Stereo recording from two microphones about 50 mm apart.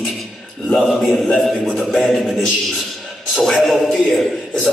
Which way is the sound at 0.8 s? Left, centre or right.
Centre.